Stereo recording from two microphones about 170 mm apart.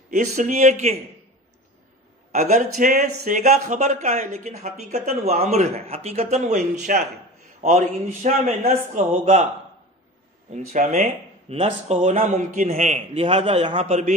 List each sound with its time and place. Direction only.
0.1 s speech: 45° right (ahead or behind)
2.3 s speech: 40° right (ahead or behind)
10.5 s speech: 45° right (ahead or behind)